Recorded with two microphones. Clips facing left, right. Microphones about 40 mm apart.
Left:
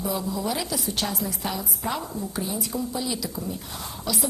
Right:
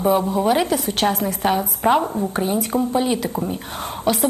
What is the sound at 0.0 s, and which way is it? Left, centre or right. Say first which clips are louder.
A woman's voice: right 10 dB; right.